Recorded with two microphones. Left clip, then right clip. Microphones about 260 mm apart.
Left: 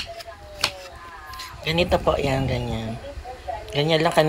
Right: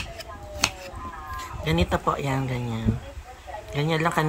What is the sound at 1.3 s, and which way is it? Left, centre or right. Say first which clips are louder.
Speech: left 4 dB; centre.